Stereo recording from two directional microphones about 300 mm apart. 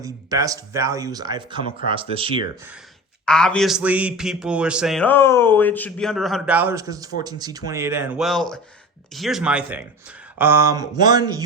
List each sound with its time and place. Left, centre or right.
0.0 s speech: centre
3.2 s speech: centre